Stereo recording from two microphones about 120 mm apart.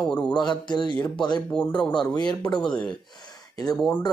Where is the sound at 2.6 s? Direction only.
10° left (ahead or behind).